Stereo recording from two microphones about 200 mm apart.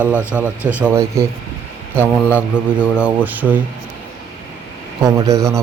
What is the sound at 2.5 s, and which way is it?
Speech, 5° right (ahead or behind).